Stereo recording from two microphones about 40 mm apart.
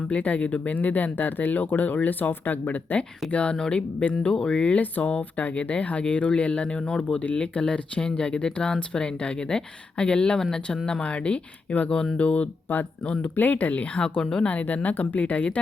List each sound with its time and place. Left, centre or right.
0.1 s speech: left
3.3 s speech: left
13.3 s speech: left
14.0 s speech: left
14.4 s speech: left